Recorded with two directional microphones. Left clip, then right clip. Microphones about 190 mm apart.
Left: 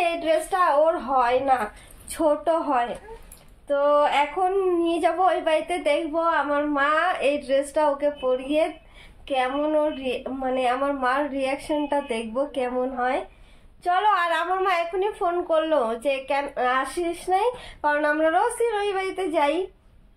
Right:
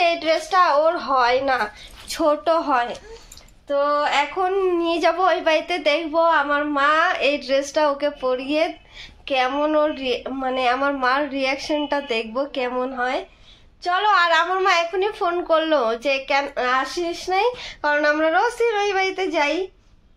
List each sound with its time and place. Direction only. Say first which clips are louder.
0.0 s a woman's voice: right 3 dB; 20° right (ahead or behind)